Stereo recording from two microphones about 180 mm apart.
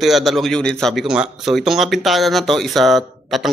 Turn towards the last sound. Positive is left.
turn(degrees=0)  # may be behind; listen again after turning